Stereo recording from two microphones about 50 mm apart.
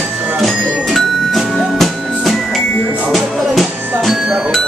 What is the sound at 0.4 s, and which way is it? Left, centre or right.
Music, centre.